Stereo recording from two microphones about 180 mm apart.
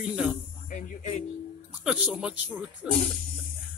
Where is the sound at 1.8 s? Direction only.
5° right (ahead or behind).